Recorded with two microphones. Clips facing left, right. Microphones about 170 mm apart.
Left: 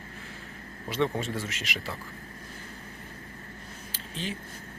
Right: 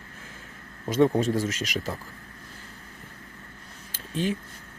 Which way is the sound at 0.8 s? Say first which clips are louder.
Right 7 dB; 45° right (ahead or behind).